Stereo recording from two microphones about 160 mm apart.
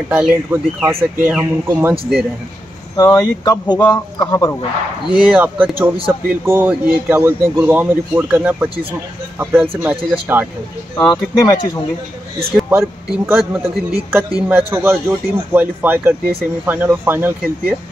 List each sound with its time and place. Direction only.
0.1 s a man's voice: 10° right (ahead or behind)
3.0 s speech: 25° left (ahead or behind)
5.1 s a man's voice: 10° right (ahead or behind)
11.0 s speech: 25° left (ahead or behind)
12.6 s a man's voice: 10° right (ahead or behind)